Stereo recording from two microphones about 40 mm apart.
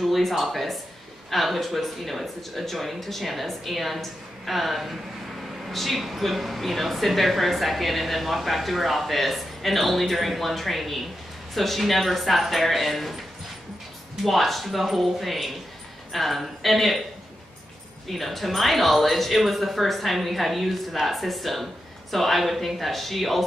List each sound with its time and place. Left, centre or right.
0.0 s speech: centre
14.2 s speech: centre
18.0 s speech: centre